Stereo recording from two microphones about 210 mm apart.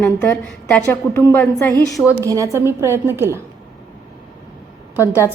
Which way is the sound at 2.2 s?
15° right (ahead or behind).